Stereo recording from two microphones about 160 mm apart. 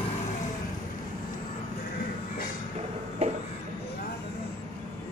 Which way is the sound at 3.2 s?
40° right (ahead or behind).